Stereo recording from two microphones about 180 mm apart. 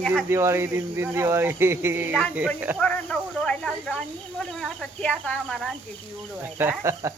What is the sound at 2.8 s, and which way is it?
Speech, 5° left (ahead or behind).